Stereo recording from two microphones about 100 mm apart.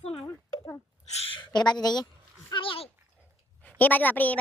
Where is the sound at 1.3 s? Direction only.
50° left (ahead or behind).